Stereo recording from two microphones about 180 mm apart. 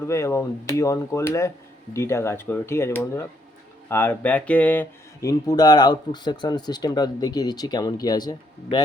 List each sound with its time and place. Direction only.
0.1 s speech: 15° left (ahead or behind)